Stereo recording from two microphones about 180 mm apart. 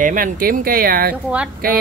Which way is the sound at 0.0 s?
50° right (ahead or behind).